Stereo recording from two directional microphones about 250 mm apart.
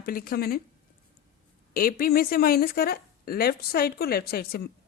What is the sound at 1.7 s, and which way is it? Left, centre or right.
A woman's voice, left.